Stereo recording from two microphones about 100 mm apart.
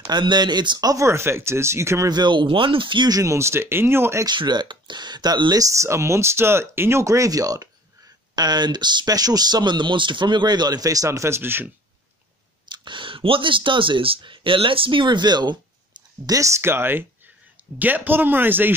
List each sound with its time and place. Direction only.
0.0 s speech: 45° right (ahead or behind); by 2.0 s 30° right (ahead or behind)
2.0 s speech: 45° right (ahead or behind)
3.2 s speech: 30° right (ahead or behind)
4.3 s speech: 45° right (ahead or behind); by 11.7 s 20° right (ahead or behind)
12.6 s speech: 50° right (ahead or behind)
16.3 s speech: 30° right (ahead or behind)